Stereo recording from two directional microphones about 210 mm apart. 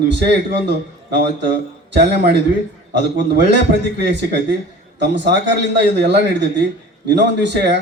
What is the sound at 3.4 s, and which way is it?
A man's voice, 55° right (ahead or behind).